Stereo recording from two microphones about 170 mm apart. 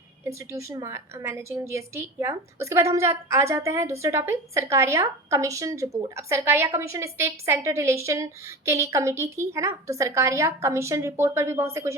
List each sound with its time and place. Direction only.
0.3 s a woman's voice: 20° right (ahead or behind)